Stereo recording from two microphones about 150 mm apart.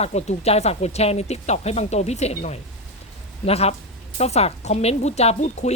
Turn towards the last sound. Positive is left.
turn(degrees=50)  # may be behind; listen again after turning